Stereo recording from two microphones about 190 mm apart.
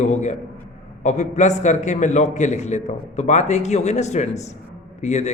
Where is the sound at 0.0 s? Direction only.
40° left (ahead or behind).